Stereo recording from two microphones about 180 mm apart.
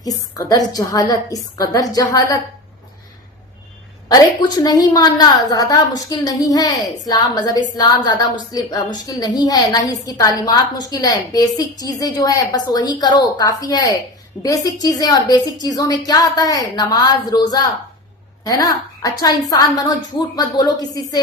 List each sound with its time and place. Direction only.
0.0 s a woman's voice: 20° left (ahead or behind)
4.1 s a woman's voice: 20° left (ahead or behind)